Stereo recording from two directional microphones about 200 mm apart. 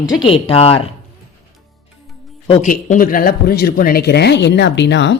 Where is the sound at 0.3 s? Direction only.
30° left (ahead or behind).